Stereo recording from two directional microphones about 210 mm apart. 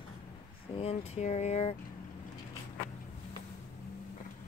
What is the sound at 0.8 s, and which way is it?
Speech, 30° left (ahead or behind).